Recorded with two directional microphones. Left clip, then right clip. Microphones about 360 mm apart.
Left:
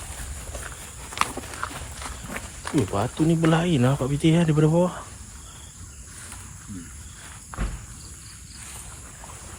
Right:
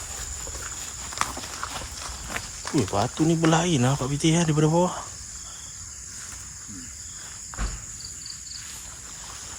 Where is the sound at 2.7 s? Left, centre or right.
Centre.